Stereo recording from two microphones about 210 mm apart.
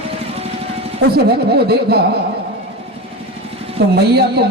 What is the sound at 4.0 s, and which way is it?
Speech, 50° right (ahead or behind).